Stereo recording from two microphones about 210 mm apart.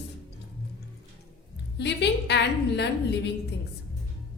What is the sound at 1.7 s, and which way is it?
A woman's voice, 55° left (ahead or behind).